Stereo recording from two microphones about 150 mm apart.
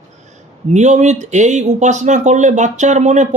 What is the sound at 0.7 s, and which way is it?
Speech, 50° right (ahead or behind).